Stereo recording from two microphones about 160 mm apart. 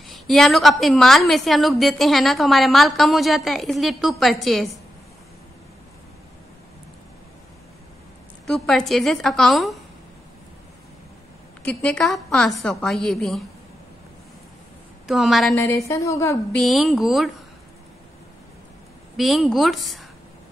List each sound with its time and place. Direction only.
0.0 s a woman's voice: centre (ahead or behind)
8.5 s a woman's voice: 5° left (ahead or behind)
11.6 s a woman's voice: 10° left (ahead or behind)
15.0 s a woman's voice: centre (ahead or behind)
15.5 s a woman's voice: 20° left (ahead or behind)
16.5 s a woman's voice: centre (ahead or behind)
19.1 s a woman's voice: centre (ahead or behind)